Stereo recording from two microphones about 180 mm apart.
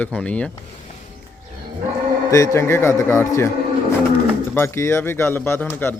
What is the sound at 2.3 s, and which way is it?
Speech, 15° left (ahead or behind).